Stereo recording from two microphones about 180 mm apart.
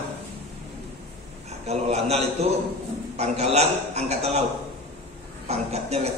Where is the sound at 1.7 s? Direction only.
35° right (ahead or behind).